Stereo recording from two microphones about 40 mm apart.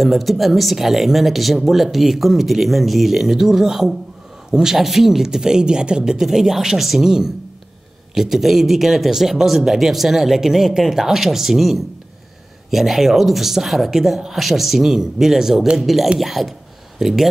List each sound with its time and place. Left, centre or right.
0.0 s speech: centre; by 6.1 s right
6.1 s speech: centre